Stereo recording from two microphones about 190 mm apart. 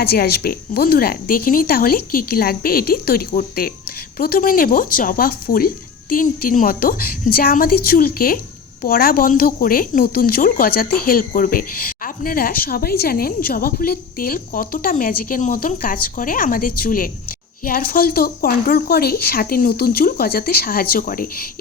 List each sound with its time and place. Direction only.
0.0 s speech: 55° left (ahead or behind)